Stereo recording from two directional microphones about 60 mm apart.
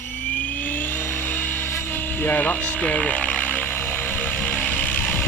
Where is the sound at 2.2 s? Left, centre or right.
Left.